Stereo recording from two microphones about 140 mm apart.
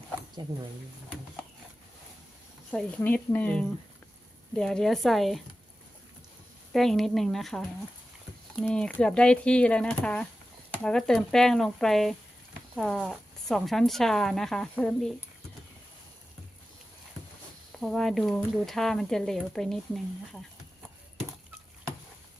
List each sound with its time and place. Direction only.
0.4 s speech: 30° right (ahead or behind)
2.7 s speech: 10° left (ahead or behind)
6.7 s speech: centre (ahead or behind)
17.7 s speech: centre (ahead or behind)